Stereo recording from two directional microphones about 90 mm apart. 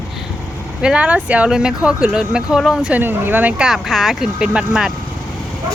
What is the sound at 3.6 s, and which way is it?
A woman's voice, 5° right (ahead or behind).